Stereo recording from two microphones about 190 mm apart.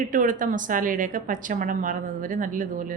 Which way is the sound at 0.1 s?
45° right (ahead or behind).